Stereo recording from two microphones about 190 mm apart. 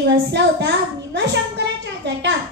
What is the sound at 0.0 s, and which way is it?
A child's voice, 70° right (ahead or behind).